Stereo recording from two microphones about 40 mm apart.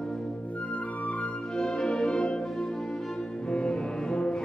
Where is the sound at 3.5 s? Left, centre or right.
Left.